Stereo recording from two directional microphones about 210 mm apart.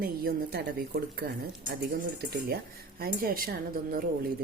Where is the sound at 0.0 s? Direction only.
45° right (ahead or behind).